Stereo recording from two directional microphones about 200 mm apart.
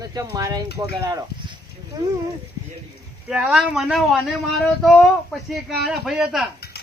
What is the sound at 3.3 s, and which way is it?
Speech, 5° right (ahead or behind).